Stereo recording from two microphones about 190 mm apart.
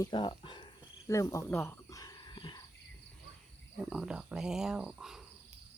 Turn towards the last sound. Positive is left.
turn(degrees=0)  # may be behind; listen again after turning